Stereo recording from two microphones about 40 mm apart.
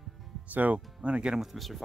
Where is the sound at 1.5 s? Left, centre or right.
Centre.